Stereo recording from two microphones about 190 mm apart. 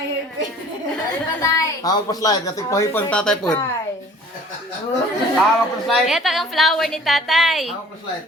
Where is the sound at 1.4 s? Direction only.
20° left (ahead or behind).